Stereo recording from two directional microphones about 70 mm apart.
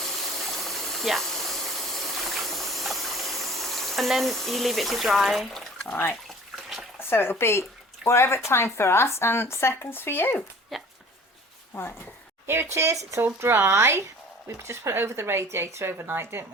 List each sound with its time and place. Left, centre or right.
0.0 s a sound: centre
5.9 s speech: left
10.7 s speech: centre
11.7 s speech: left
12.5 s speech: right